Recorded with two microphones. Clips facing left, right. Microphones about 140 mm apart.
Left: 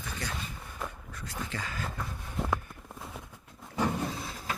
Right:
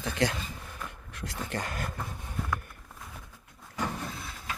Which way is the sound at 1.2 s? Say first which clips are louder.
Right 3 dB; 60° right (ahead or behind).